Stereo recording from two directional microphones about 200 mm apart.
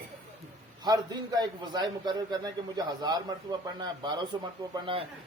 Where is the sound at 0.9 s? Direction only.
20° right (ahead or behind).